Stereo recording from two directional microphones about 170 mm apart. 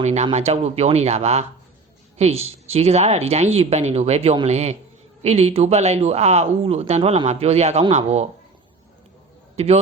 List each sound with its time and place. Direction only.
0.0 s speech: 40° right (ahead or behind)